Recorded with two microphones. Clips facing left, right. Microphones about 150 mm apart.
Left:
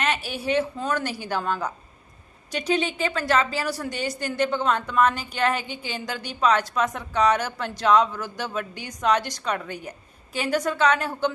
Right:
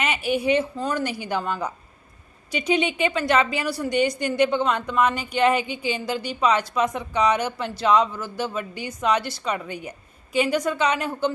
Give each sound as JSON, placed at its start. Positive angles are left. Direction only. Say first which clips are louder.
{"t": 0.2, "sound": "a woman's voice", "louder": "right 10 dB", "side_deg": -55}
{"t": 0.9, "sound": "a woman's voice", "louder": "right 1 dB", "side_deg": -10}